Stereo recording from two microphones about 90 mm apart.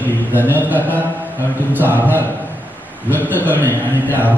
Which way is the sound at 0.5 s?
20° right (ahead or behind).